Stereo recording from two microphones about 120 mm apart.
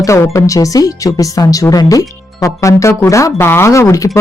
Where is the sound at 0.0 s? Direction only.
25° left (ahead or behind).